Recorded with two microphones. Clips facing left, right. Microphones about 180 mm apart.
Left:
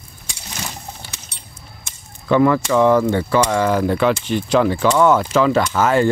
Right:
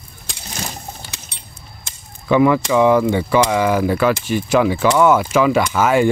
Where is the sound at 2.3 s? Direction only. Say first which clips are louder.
Right 1 dB; 10° right (ahead or behind).